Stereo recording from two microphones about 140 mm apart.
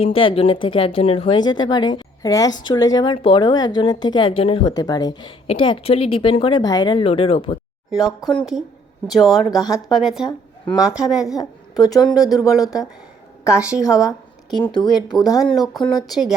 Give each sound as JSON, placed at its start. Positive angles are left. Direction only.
{"t": 0.0, "sound": "speech", "side_deg": 40}
{"t": 4.7, "sound": "speech", "side_deg": 30}
{"t": 8.0, "sound": "a woman's voice", "side_deg": 0}
{"t": 11.3, "sound": "a woman's voice", "side_deg": 25}
{"t": 13.6, "sound": "a woman's voice", "side_deg": -5}
{"t": 14.7, "sound": "speech", "side_deg": 30}
{"t": 15.4, "sound": "a woman's voice", "side_deg": 0}
{"t": 15.8, "sound": "speech", "side_deg": 30}